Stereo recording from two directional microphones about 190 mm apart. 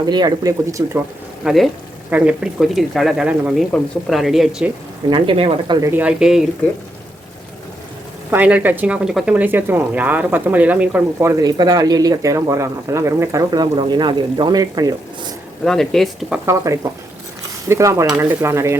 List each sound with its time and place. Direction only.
0.0 s speech: 20° right (ahead or behind)
1.5 s speech: centre (ahead or behind)
5.0 s speech: 25° right (ahead or behind)
6.0 s speech: 5° right (ahead or behind)
8.3 s speech: 10° right (ahead or behind)
15.6 s speech: centre (ahead or behind)
16.5 s speech: 15° right (ahead or behind)